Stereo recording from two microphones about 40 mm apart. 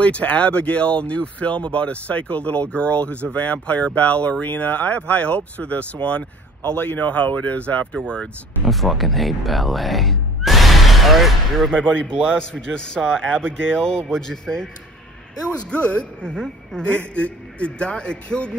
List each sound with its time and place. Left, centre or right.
0.0 s speech: left
6.8 s speech: left
8.6 s speech: centre
11.7 s a man's voice: left
15.4 s a man's voice: left
16.8 s a man's voice: left